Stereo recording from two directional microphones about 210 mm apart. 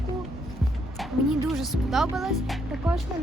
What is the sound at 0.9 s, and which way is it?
Speech, centre (ahead or behind).